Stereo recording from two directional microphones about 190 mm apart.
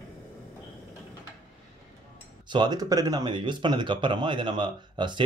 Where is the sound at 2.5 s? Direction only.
20° right (ahead or behind).